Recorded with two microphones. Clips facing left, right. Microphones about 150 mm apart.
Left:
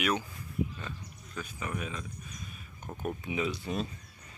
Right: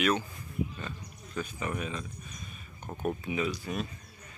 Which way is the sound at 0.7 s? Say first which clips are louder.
Right 2 dB; centre (ahead or behind).